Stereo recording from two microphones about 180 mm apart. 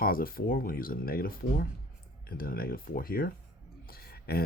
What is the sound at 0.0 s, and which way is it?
Speech, 55° left (ahead or behind).